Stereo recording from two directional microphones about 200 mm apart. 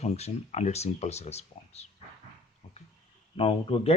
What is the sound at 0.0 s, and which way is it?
Speech, 30° left (ahead or behind).